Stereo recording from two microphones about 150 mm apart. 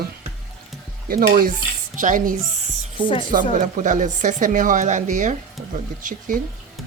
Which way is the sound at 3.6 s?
60° right (ahead or behind).